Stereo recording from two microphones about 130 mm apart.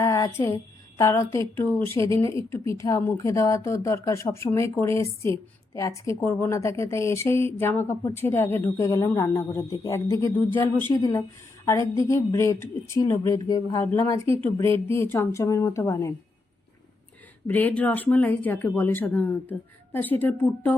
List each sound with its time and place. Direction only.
0.0 s speech: 25° left (ahead or behind)
10.9 s speech: 25° left (ahead or behind)
17.4 s speech: 15° left (ahead or behind)